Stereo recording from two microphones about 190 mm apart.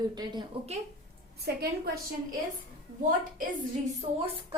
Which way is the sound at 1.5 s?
55° right (ahead or behind).